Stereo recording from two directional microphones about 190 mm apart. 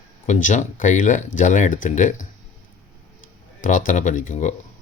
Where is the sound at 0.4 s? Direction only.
40° left (ahead or behind).